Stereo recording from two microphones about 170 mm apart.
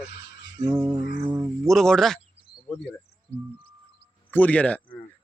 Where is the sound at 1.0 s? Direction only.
90° left.